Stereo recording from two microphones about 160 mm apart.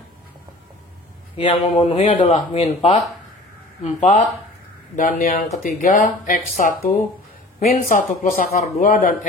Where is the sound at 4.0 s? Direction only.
45° left (ahead or behind).